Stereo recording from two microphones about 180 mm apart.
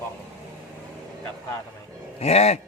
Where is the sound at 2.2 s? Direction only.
35° left (ahead or behind).